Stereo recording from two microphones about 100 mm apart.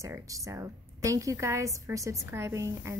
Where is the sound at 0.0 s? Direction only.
35° right (ahead or behind).